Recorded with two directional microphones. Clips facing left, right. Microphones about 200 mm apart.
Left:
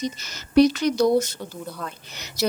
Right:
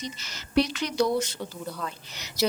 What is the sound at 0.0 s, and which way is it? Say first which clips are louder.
Speech: left 8 dB; 45° left (ahead or behind).